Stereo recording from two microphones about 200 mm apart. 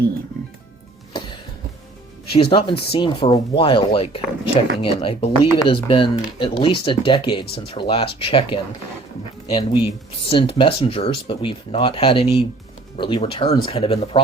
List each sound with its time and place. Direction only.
2.3 s speech: 30° left (ahead or behind)